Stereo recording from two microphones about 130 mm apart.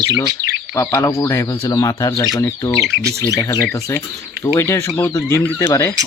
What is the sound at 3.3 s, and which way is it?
Speech, 20° left (ahead or behind).